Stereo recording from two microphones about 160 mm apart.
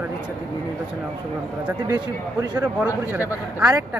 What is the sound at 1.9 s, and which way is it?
Speech, 25° right (ahead or behind).